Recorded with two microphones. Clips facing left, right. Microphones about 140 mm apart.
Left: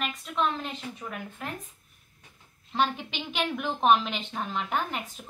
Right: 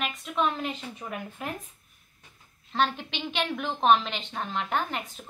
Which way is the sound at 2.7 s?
5° left (ahead or behind).